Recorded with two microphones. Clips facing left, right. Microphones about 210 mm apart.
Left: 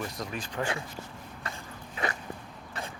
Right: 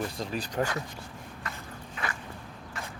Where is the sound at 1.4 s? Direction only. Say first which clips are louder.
Left 1 dB; 30° left (ahead or behind).